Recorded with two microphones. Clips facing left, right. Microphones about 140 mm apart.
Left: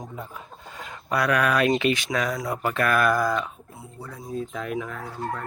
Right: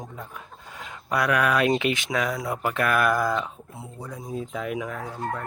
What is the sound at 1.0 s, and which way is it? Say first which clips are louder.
Speech: even; 15° right (ahead or behind).